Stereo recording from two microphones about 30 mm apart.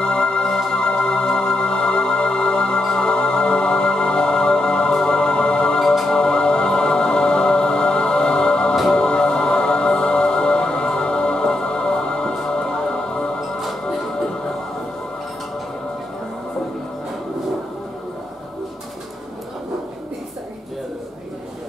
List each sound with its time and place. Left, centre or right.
0.0 s music: left